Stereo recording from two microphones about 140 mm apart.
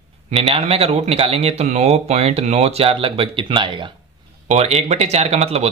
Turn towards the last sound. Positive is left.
turn(degrees=-50)  # may be behind; listen again after turning